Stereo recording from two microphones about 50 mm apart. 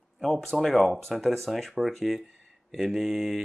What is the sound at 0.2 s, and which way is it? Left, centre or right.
Speech, centre.